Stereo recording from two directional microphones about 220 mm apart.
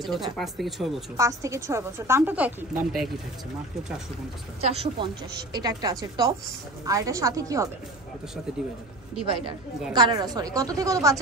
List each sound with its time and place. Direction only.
0.4 s speech: centre (ahead or behind)
1.1 s a woman's voice: 15° right (ahead or behind)
4.6 s a woman's voice: 25° right (ahead or behind)
9.9 s a woman's voice: 20° right (ahead or behind)